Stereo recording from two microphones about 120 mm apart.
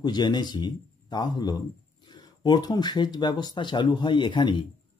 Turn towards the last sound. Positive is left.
turn(degrees=40)  # may be behind; listen again after turning